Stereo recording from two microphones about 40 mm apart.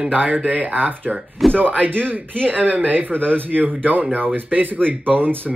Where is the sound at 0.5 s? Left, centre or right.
Right.